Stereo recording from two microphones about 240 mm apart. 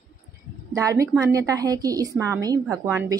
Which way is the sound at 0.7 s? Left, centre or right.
Centre.